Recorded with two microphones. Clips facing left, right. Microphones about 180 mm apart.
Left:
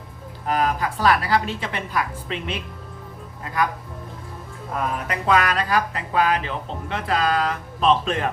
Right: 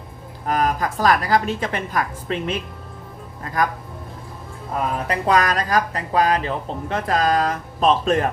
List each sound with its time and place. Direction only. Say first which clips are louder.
0.4 s a woman's voice: right 1 dB; 45° right (ahead or behind)
4.7 s speech: right 3 dB; 35° right (ahead or behind)